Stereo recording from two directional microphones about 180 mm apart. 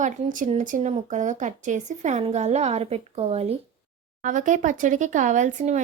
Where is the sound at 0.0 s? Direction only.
45° right (ahead or behind).